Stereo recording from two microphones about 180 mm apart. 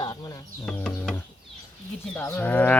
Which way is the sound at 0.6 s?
5° left (ahead or behind).